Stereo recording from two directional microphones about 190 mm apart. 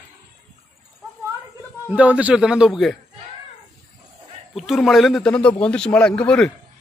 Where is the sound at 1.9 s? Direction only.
5° right (ahead or behind).